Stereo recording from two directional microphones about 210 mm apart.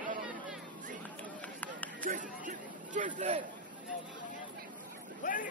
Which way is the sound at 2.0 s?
40° right (ahead or behind).